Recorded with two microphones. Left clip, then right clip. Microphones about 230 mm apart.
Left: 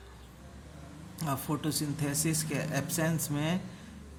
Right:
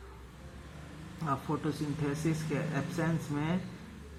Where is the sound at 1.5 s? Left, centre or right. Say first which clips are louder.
Left 1 dB; left.